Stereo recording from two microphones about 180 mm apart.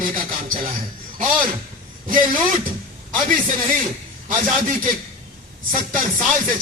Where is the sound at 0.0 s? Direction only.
50° right (ahead or behind).